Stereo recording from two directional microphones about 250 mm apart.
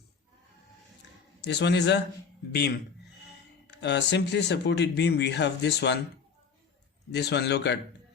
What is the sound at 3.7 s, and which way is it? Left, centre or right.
Speech, left.